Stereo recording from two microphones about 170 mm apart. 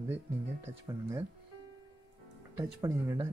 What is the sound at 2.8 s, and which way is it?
Speech, 15° right (ahead or behind).